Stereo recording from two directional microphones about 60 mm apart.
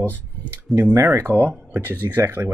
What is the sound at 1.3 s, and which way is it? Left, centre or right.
Speech, right.